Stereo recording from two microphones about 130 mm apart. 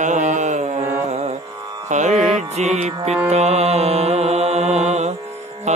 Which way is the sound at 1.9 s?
65° right (ahead or behind).